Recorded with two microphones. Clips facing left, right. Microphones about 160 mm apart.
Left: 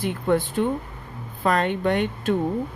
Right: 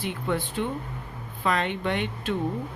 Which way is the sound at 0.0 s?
45° left (ahead or behind).